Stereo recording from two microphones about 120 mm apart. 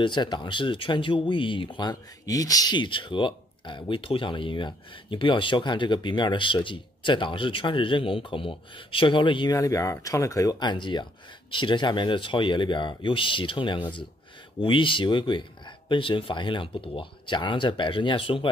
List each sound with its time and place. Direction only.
0.0 s speech: 40° left (ahead or behind)
9.6 s speech: 25° left (ahead or behind); by 18.5 s 45° left (ahead or behind)